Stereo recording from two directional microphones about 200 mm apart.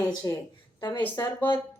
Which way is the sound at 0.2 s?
15° left (ahead or behind).